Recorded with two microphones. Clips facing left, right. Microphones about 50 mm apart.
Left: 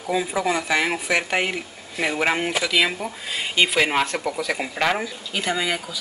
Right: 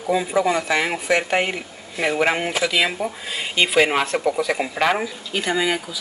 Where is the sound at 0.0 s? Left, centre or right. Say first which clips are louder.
Right 3 dB; centre.